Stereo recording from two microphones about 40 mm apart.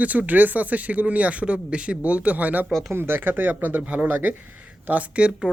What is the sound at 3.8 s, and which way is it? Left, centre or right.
Speech, right.